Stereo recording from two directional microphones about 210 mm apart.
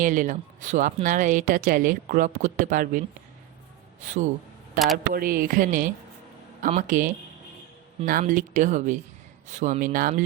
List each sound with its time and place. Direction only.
0.0 s speech: 35° right (ahead or behind)
4.0 s speech: 35° right (ahead or behind)